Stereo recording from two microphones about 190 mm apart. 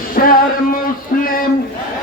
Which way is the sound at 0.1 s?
50° left (ahead or behind).